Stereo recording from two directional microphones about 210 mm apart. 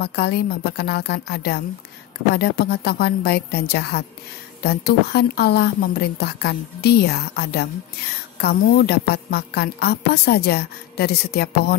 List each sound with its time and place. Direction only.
0.0 s a woman's voice: 50° left (ahead or behind)